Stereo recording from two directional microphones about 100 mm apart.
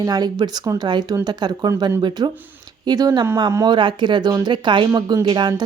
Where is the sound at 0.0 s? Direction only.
40° right (ahead or behind).